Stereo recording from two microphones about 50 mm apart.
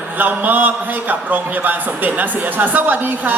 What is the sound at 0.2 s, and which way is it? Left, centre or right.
A man's voice, right.